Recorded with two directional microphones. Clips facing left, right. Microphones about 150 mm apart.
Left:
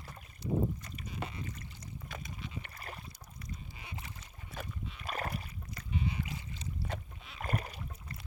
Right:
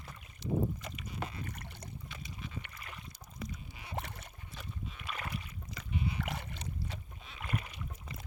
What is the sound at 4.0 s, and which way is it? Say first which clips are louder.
Boat: right 7 dB; 65° right (ahead or behind).